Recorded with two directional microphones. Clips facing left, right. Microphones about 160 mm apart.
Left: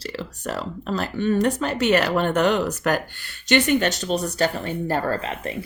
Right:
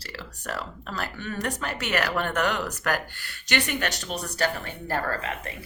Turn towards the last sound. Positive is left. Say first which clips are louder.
# left 5 dB
turn(degrees=25)  # may be behind; listen again after turning